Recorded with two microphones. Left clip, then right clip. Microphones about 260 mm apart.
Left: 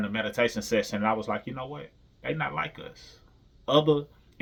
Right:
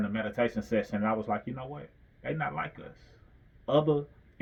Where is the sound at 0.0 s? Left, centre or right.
Centre.